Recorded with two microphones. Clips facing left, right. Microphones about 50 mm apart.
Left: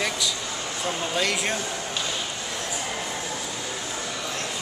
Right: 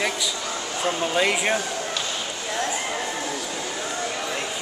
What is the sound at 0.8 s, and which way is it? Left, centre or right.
Speech, centre.